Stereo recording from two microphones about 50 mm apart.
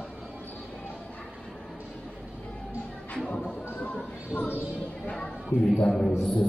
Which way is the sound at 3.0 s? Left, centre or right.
Left.